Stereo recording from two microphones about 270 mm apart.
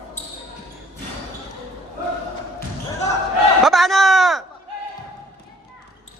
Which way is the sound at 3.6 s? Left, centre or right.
Centre.